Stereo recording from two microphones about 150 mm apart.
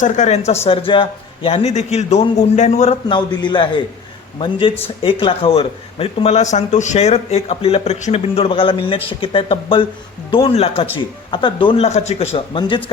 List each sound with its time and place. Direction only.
0.0 s speech: 55° left (ahead or behind)
3.1 s a man's voice: 30° left (ahead or behind)
12.5 s a man's voice: 30° left (ahead or behind)